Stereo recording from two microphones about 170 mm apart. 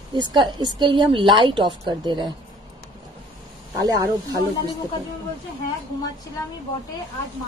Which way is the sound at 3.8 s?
20° right (ahead or behind).